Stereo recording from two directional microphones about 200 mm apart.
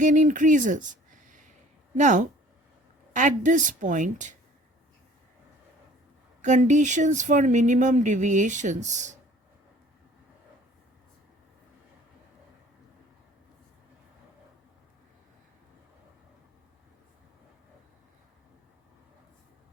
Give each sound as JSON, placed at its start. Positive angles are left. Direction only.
{"t": 0.0, "sound": "speech", "side_deg": -40}
{"t": 2.0, "sound": "speech", "side_deg": -40}
{"t": 6.4, "sound": "speech", "side_deg": -35}